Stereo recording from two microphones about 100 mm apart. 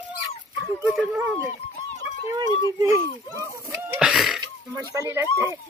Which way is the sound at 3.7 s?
5° right (ahead or behind).